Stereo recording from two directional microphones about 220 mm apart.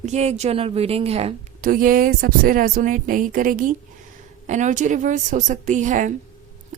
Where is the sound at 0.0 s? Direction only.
30° right (ahead or behind).